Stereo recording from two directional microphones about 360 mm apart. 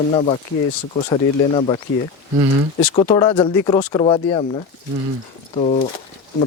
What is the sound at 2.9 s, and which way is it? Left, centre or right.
Speech, centre.